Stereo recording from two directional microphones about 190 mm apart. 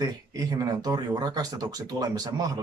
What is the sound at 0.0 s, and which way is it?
Speech, 20° right (ahead or behind).